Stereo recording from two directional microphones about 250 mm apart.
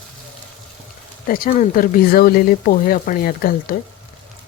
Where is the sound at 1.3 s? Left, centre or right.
Left.